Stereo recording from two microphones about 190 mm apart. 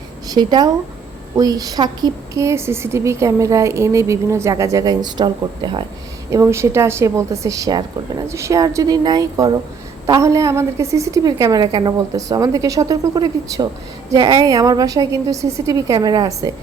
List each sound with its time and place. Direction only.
0.3 s a woman's voice: 20° right (ahead or behind)